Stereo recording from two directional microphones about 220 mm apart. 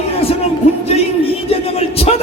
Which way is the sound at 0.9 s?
25° left (ahead or behind).